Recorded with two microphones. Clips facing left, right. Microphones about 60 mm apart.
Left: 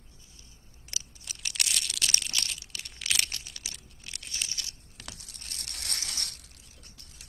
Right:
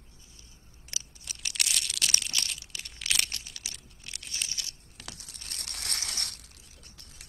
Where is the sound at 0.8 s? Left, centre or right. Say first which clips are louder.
Even; centre.